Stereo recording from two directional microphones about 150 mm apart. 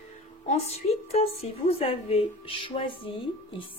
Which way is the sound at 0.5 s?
45° left (ahead or behind).